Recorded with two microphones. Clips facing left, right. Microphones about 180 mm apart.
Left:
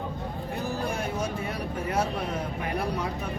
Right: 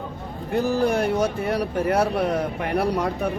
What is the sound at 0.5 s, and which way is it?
Speech, 75° right (ahead or behind).